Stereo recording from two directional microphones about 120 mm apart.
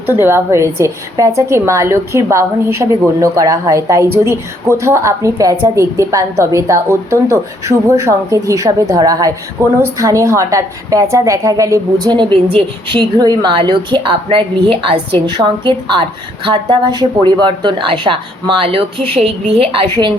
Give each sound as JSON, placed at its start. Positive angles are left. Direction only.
{"t": 0.1, "sound": "a woman's voice", "side_deg": -20}
{"t": 12.1, "sound": "a woman's voice", "side_deg": -45}